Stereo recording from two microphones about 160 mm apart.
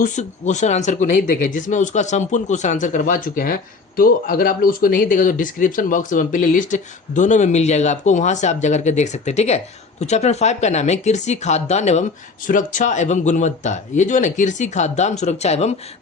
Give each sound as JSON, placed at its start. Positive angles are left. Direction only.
{"t": 0.0, "sound": "speech", "side_deg": 45}